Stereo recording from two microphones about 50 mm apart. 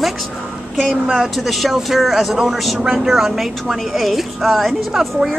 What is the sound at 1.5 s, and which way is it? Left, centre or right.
A woman's voice, centre.